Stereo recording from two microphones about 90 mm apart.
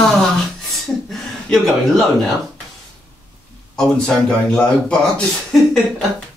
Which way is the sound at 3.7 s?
10° left (ahead or behind).